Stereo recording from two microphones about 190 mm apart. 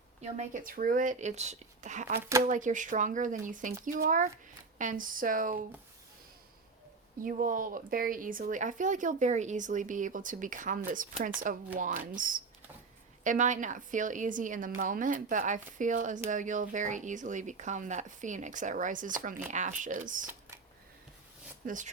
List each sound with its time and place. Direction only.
0.2 s speech: 35° right (ahead or behind)
7.2 s speech: 45° right (ahead or behind)
21.6 s speech: 50° right (ahead or behind)